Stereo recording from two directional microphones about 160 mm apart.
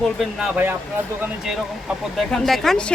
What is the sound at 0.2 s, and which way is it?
Speech, 5° right (ahead or behind).